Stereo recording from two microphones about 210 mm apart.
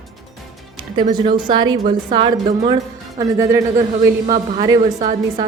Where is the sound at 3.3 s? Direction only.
15° right (ahead or behind).